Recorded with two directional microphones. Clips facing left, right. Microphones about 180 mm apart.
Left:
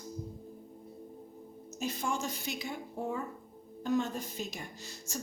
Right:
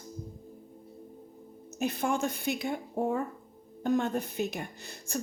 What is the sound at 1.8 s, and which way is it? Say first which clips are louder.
A woman's voice: right 6 dB; 60° right (ahead or behind).